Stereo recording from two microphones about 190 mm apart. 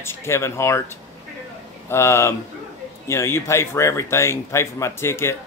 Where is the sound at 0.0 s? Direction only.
15° left (ahead or behind).